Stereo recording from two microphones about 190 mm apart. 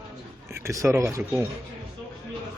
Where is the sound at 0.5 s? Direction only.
15° right (ahead or behind).